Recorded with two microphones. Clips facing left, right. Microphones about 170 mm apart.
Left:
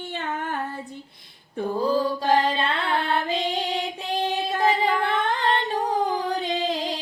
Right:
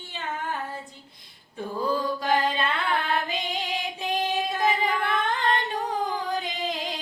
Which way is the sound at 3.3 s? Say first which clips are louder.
Left 5 dB; 35° left (ahead or behind).